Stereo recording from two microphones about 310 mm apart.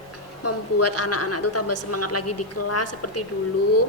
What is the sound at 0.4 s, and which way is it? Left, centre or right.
A woman's voice, left.